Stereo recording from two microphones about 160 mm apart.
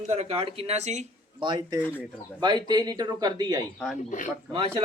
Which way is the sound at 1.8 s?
10° left (ahead or behind).